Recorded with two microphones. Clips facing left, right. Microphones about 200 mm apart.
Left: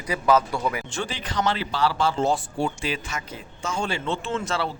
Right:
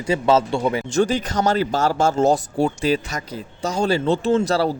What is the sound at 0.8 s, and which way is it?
Speech, 40° right (ahead or behind).